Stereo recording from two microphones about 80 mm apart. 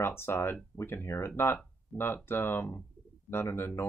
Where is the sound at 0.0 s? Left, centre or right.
Left.